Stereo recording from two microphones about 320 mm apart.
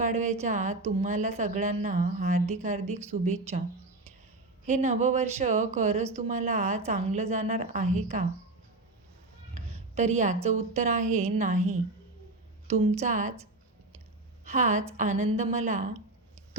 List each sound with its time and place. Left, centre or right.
0.0 s a woman's voice: right
4.6 s a woman's voice: right
9.6 s a woman's voice: right
12.8 s a woman's voice: right
14.4 s a woman's voice: right